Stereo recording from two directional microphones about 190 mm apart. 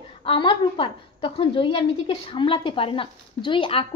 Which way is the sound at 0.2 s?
25° left (ahead or behind).